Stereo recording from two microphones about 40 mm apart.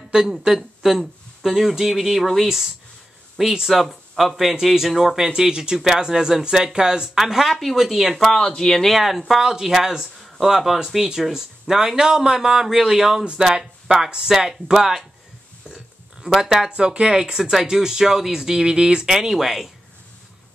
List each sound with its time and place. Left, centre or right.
0.1 s speech: centre
7.2 s speech: centre
8.2 s speech: centre
8.9 s speech: centre
16.3 s speech: centre
17.1 s speech: centre
19.0 s speech: centre